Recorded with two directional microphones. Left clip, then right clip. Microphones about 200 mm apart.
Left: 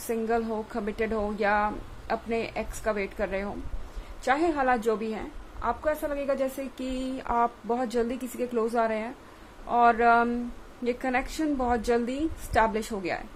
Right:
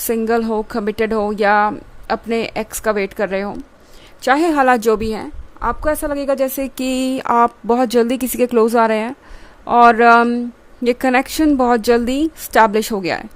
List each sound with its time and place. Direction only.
0.1 s a woman's voice: 55° right (ahead or behind)